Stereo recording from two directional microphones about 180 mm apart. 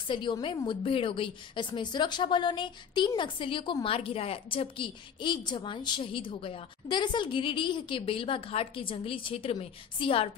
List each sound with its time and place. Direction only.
0.1 s a woman's voice: 25° left (ahead or behind)